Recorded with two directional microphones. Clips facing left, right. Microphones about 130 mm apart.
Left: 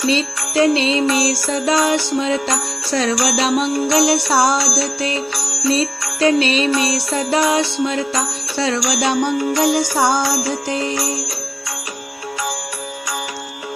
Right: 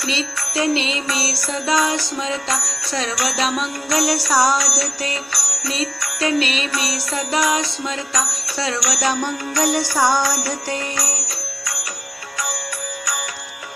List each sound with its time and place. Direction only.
0.6 s music: 35° left (ahead or behind)